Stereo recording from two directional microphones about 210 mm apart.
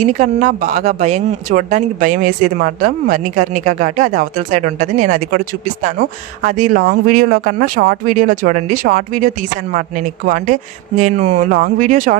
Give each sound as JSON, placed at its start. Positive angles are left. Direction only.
{"t": 0.0, "sound": "speech", "side_deg": -35}